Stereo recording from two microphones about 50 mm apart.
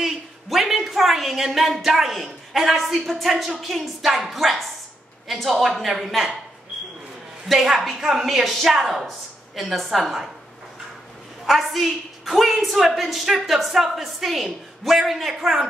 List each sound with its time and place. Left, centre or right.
0.0 s a woman's voice: centre
7.4 s a woman's voice: centre
11.4 s a woman's voice: centre